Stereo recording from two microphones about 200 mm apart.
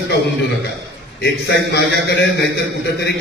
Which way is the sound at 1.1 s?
55° left (ahead or behind).